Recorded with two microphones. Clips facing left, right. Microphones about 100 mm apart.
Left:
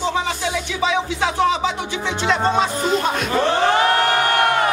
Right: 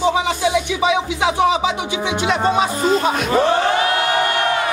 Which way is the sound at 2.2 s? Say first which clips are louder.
Even; 10° right (ahead or behind).